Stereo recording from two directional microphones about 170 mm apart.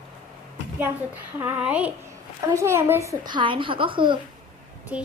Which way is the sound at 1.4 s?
10° right (ahead or behind).